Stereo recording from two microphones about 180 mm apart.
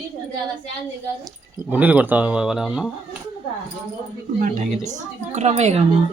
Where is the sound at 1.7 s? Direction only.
10° right (ahead or behind).